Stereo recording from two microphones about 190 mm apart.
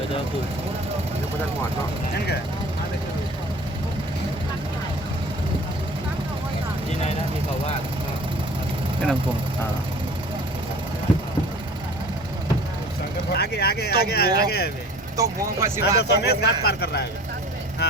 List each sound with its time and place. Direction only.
13.3 s speech: 60° left (ahead or behind)
15.1 s speech: 15° right (ahead or behind)
16.0 s speech: 60° left (ahead or behind)